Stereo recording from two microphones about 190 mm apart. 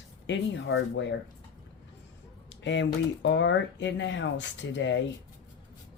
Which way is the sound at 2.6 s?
70° left (ahead or behind).